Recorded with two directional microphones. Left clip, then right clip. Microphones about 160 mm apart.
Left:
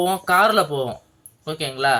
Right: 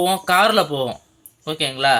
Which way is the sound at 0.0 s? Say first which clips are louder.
Right 1 dB; 25° right (ahead or behind).